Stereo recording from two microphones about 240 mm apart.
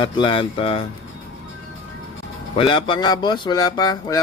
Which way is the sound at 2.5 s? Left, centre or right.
Left.